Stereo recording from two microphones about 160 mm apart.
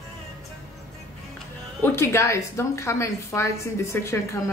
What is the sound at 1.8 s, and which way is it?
A woman's voice, 15° left (ahead or behind).